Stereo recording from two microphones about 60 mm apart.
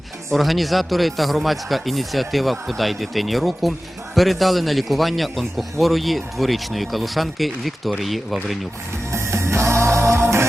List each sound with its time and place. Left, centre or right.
0.3 s a man's voice: centre
9.1 s music: right